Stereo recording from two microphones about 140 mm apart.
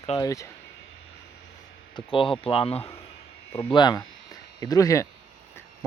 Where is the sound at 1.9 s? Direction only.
40° left (ahead or behind).